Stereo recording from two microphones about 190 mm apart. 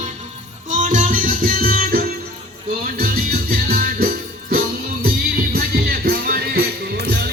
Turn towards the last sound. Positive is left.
turn(degrees=-55)  # may be behind; listen again after turning